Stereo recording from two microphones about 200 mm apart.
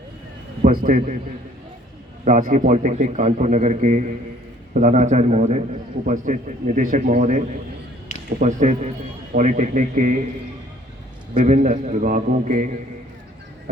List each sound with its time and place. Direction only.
0.6 s a man's voice: 45° right (ahead or behind)
2.2 s a man's voice: 40° right (ahead or behind)
11.3 s a man's voice: 35° right (ahead or behind)